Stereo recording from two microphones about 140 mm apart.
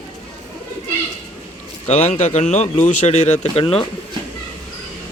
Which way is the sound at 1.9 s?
55° left (ahead or behind).